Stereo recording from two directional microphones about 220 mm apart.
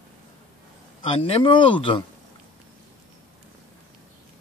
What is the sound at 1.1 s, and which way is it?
Speech, 25° left (ahead or behind).